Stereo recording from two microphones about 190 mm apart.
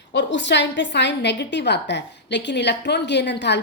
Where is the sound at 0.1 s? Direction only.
65° left (ahead or behind).